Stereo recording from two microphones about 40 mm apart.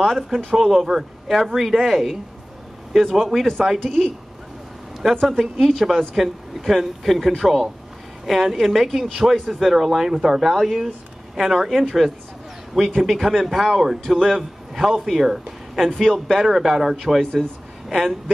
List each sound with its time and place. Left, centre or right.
0.0 s speech: centre
3.8 s speech: centre
5.9 s speech: centre
17.2 s speech: centre
17.8 s speech: centre